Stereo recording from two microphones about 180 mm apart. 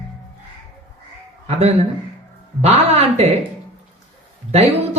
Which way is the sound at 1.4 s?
35° right (ahead or behind).